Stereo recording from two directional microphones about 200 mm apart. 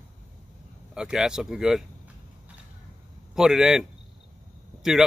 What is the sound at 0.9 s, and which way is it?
Speech, 5° right (ahead or behind).